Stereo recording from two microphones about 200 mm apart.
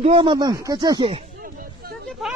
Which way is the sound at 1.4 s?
45° right (ahead or behind).